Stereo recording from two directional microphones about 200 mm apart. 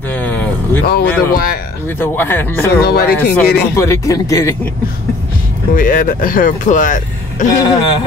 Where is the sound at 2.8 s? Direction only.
50° left (ahead or behind).